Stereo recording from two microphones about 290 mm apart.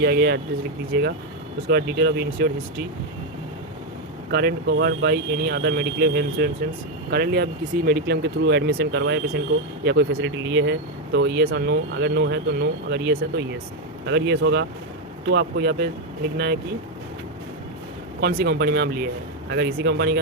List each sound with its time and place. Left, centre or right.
0.0 s speech: right
4.3 s speech: right
18.2 s speech: right